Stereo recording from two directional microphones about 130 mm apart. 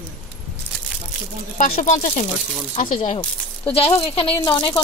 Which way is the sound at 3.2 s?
45° left (ahead or behind).